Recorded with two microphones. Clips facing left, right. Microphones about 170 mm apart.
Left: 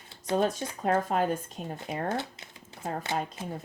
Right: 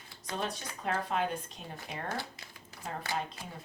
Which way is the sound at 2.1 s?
20° left (ahead or behind).